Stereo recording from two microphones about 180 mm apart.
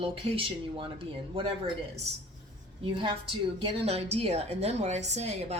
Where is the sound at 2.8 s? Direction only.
25° right (ahead or behind).